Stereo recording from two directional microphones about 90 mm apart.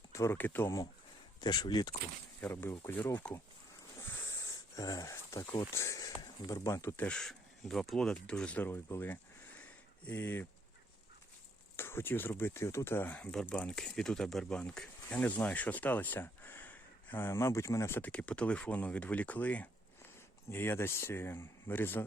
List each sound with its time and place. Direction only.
0.1 s a sound: 30° left (ahead or behind)
0.3 s speech: 20° left (ahead or behind)
1.4 s speech: 50° left (ahead or behind)
2.4 s speech: 25° left (ahead or behind)
3.9 s wheeze: 35° left (ahead or behind)
5.1 s speech: 30° left (ahead or behind)
6.9 s speech: 15° left (ahead or behind)
11.8 s speech: 25° left (ahead or behind)
18.1 s speech: 15° left (ahead or behind)